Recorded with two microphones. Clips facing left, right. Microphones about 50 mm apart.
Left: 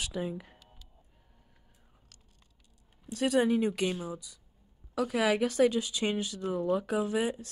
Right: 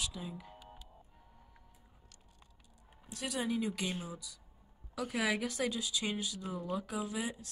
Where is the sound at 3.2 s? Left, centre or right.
Left.